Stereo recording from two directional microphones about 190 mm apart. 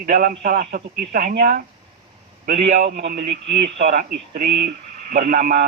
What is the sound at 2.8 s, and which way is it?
A man's voice, 60° right (ahead or behind).